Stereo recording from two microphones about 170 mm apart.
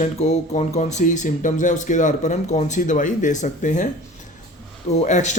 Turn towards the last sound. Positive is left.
turn(degrees=45)  # may be behind; listen again after turning